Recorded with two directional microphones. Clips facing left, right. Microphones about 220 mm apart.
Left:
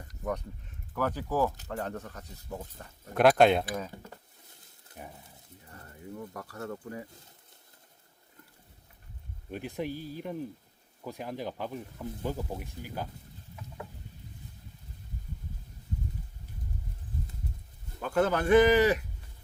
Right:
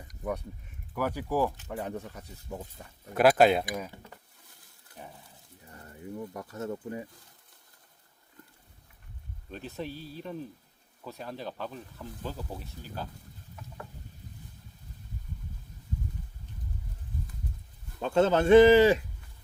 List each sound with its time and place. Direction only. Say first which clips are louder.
0.0 s a sound: even; 10° right (ahead or behind)
0.9 s speech: even; 10° right (ahead or behind)
4.9 s a sound: left 1 dB; 25° left (ahead or behind)
6.3 s speech: right 3 dB; 20° right (ahead or behind)
9.5 s speech: left 3 dB; 15° left (ahead or behind)
18.0 s speech: right 3 dB; 25° right (ahead or behind)